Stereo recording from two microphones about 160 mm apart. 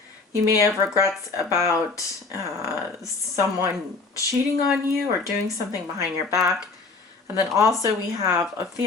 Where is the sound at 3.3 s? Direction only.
20° right (ahead or behind).